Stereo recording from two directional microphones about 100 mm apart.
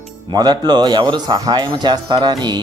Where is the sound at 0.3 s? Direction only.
45° right (ahead or behind).